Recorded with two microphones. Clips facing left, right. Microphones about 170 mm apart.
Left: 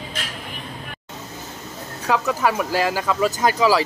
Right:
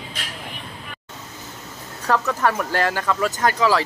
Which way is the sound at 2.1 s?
5° left (ahead or behind).